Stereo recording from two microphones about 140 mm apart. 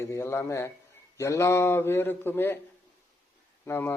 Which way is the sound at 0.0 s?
20° left (ahead or behind).